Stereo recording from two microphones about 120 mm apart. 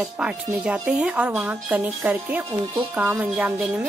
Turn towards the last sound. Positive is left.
turn(degrees=-10)  # may be behind; listen again after turning